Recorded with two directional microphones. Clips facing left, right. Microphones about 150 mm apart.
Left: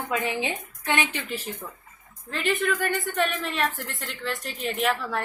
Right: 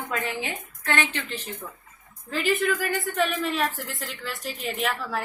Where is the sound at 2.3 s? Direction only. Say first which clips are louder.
Right 1 dB; centre (ahead or behind).